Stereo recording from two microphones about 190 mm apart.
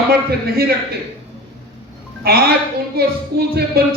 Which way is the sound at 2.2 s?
55° right (ahead or behind).